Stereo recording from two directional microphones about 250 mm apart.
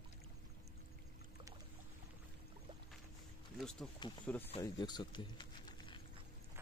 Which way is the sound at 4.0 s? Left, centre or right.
Centre.